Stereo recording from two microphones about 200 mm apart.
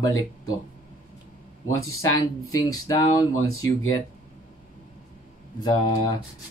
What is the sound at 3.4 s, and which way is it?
Speech, 90° left.